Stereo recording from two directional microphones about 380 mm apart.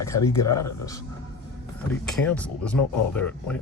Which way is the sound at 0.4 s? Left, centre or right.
Left.